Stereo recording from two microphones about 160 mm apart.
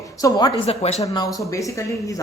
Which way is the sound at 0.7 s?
40° left (ahead or behind).